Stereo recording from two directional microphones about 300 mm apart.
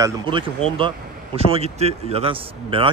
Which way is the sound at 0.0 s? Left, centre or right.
Centre.